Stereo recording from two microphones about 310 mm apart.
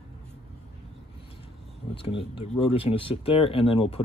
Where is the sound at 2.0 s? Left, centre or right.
Centre.